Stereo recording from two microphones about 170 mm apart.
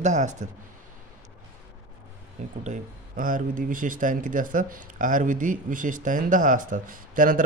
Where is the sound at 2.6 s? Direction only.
50° right (ahead or behind).